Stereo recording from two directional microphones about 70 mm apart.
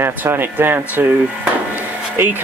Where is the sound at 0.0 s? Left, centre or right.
Right.